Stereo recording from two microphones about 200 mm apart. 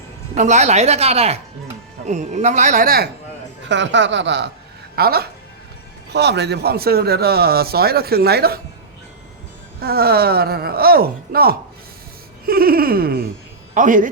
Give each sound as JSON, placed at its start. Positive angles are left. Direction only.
{"t": 0.3, "sound": "speech", "side_deg": -35}
{"t": 3.7, "sound": "speech", "side_deg": -65}
{"t": 4.9, "sound": "speech", "side_deg": -50}
{"t": 9.8, "sound": "speech", "side_deg": -50}